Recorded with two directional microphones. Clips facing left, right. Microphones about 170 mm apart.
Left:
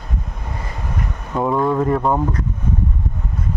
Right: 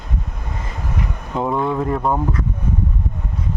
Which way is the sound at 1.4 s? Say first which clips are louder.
Left 3 dB; centre (ahead or behind).